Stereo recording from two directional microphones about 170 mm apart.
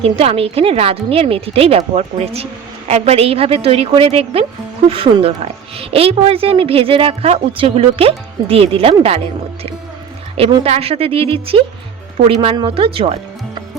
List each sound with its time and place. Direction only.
0.0 s a woman's voice: 35° right (ahead or behind)
10.3 s a woman's voice: 35° right (ahead or behind)